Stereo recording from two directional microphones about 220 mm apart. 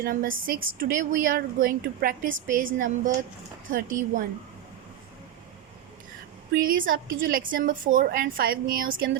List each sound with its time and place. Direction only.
0.0 s a woman's voice: 40° right (ahead or behind)
3.7 s a woman's voice: 40° right (ahead or behind)
6.5 s a woman's voice: 40° right (ahead or behind)